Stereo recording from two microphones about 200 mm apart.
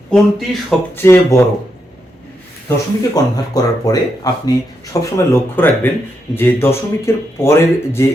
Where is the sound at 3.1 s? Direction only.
20° left (ahead or behind).